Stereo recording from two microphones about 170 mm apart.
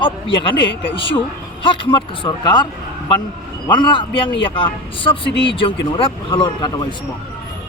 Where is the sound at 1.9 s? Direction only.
25° left (ahead or behind).